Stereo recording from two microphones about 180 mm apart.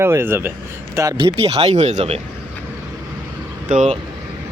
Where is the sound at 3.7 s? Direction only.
40° right (ahead or behind).